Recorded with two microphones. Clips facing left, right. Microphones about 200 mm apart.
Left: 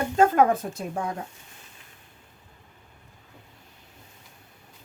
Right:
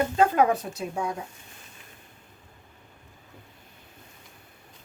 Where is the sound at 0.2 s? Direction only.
50° left (ahead or behind).